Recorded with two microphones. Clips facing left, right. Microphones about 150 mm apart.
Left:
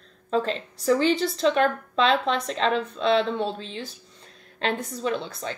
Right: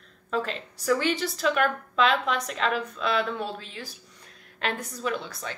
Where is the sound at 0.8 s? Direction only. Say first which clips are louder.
Left 4 dB; 30° left (ahead or behind).